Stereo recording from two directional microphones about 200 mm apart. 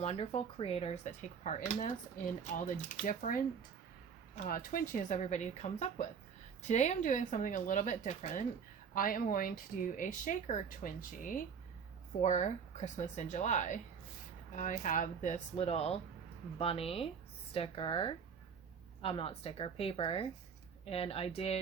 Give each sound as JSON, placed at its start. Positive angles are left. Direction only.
{"t": 0.0, "sound": "speech", "side_deg": 30}
{"t": 4.4, "sound": "a woman's voice", "side_deg": 45}